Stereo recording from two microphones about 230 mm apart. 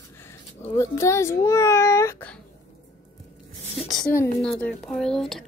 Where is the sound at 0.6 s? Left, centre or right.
Centre.